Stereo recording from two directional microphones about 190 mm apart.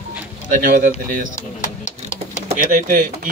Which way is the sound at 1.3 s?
40° left (ahead or behind).